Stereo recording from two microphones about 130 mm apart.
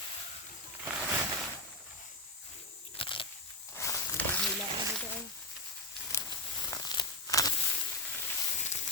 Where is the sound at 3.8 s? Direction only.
25° left (ahead or behind).